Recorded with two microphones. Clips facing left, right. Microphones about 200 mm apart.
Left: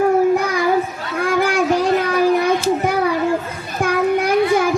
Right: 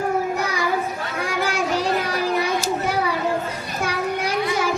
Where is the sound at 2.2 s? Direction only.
55° left (ahead or behind).